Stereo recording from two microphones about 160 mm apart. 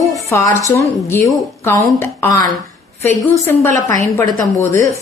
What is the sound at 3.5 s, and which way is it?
Speech, 15° left (ahead or behind).